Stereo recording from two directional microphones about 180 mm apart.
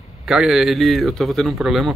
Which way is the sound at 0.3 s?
Centre (ahead or behind).